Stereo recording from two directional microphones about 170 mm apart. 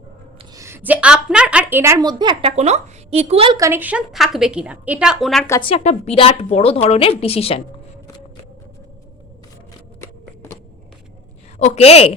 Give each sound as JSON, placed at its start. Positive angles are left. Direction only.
{"t": 0.5, "sound": "a woman's voice", "side_deg": -15}
{"t": 1.8, "sound": "a woman's voice", "side_deg": -20}
{"t": 3.6, "sound": "a woman's voice", "side_deg": -10}
{"t": 5.5, "sound": "a woman's voice", "side_deg": 30}
{"t": 11.6, "sound": "a woman's voice", "side_deg": 40}